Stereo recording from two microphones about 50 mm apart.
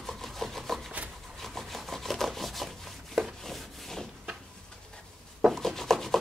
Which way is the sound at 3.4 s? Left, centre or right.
Centre.